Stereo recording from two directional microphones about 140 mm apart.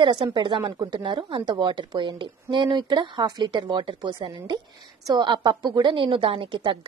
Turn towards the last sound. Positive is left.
turn(degrees=-35)  # may be behind; listen again after turning